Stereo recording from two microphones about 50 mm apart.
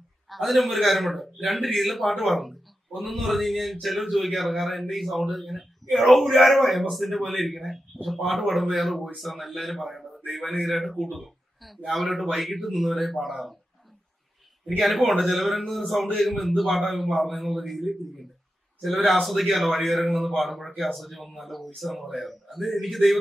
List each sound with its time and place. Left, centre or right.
0.3 s a man's voice: centre
14.8 s a man's voice: centre